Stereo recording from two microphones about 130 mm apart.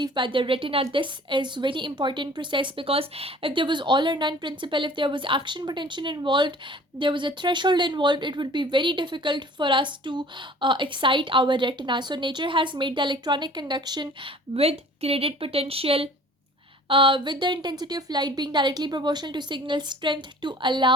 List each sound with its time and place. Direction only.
0.0 s speech: 35° right (ahead or behind)
14.5 s a woman's voice: 50° right (ahead or behind)